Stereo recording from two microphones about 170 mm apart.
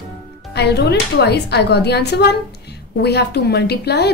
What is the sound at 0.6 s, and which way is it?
A woman's voice, 75° left (ahead or behind).